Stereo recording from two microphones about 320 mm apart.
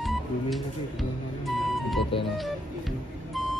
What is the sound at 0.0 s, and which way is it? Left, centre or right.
Music, centre.